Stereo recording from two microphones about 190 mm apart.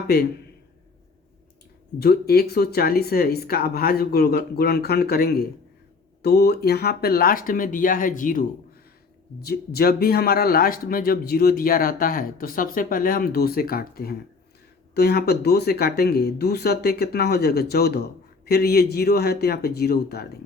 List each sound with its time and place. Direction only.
2.0 s speech: 55° left (ahead or behind)
9.4 s speech: 55° left (ahead or behind)